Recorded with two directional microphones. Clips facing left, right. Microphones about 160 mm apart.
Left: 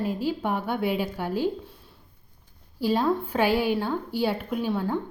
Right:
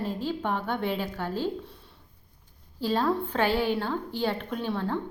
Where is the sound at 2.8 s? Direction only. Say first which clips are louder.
Left 2 dB; 10° left (ahead or behind).